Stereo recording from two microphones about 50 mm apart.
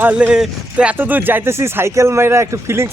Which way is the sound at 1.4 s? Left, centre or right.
Right.